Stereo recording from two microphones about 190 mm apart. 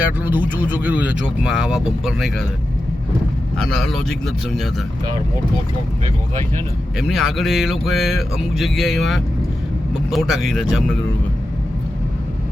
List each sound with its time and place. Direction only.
0.0 s speech: 10° right (ahead or behind)
3.6 s speech: centre (ahead or behind)
7.1 s speech: centre (ahead or behind)